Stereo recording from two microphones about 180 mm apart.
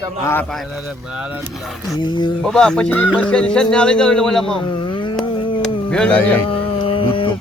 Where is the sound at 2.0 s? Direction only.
25° left (ahead or behind).